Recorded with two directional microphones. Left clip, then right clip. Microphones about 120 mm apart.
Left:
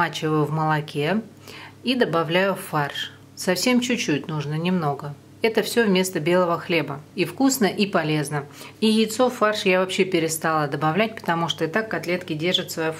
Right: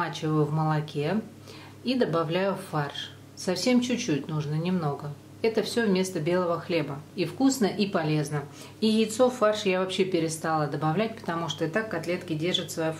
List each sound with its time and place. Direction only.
0.0 s speech: 35° left (ahead or behind)